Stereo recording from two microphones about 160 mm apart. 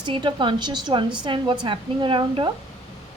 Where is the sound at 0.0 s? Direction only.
30° right (ahead or behind).